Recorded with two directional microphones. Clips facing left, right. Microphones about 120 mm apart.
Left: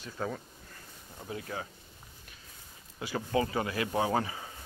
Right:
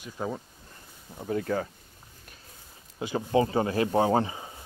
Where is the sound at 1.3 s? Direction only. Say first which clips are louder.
Right 10 dB; 45° right (ahead or behind).